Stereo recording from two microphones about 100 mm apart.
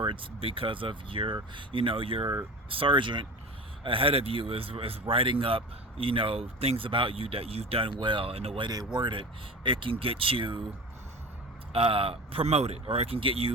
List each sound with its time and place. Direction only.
0.0 s speech: 60° right (ahead or behind)
3.8 s speech: 65° right (ahead or behind)
7.9 s speech: 55° right (ahead or behind); by 8.6 s 75° right (ahead or behind)
8.6 s speech: 45° right (ahead or behind)
11.7 s speech: 70° right (ahead or behind)